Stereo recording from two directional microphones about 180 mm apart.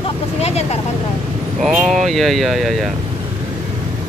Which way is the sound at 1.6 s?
Centre (ahead or behind).